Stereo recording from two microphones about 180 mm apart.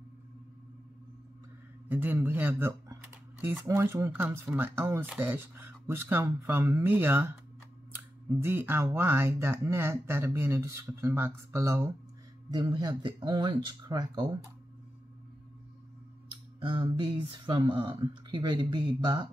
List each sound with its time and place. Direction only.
1.9 s speech: 10° right (ahead or behind)
16.6 s speech: 25° right (ahead or behind)